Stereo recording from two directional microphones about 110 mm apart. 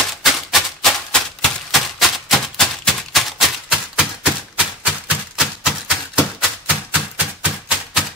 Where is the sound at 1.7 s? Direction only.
Centre (ahead or behind).